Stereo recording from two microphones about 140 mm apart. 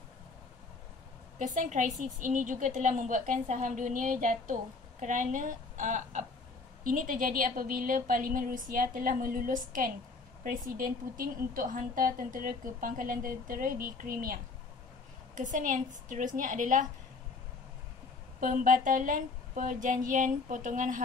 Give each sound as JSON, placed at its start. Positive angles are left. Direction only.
{"t": 1.4, "sound": "a woman's voice", "side_deg": -65}
{"t": 6.8, "sound": "a woman's voice", "side_deg": -85}
{"t": 15.3, "sound": "a woman's voice", "side_deg": -65}
{"t": 18.4, "sound": "a sound", "side_deg": -75}